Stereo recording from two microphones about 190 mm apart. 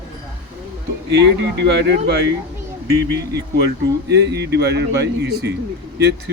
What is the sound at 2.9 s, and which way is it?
Speech, 15° right (ahead or behind).